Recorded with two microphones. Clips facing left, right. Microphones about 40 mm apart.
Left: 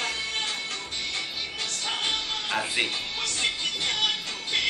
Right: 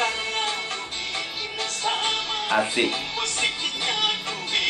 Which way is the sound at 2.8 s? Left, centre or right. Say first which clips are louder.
Right 4 dB; right.